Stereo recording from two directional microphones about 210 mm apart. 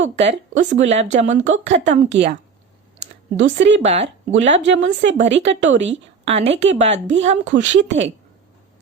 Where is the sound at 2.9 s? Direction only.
60° right (ahead or behind).